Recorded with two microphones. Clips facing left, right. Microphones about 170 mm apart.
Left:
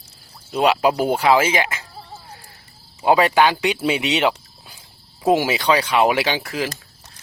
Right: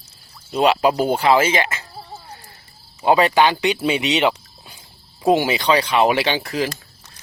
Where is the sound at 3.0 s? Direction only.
10° left (ahead or behind).